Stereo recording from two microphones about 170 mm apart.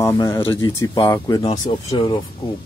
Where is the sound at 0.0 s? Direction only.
20° left (ahead or behind).